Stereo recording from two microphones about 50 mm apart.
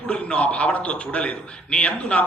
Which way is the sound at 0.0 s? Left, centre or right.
Left.